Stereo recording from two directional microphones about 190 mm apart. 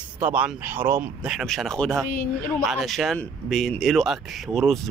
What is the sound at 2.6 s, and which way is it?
Speech, centre (ahead or behind).